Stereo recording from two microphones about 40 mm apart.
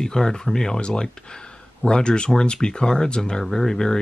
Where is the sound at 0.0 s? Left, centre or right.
Centre.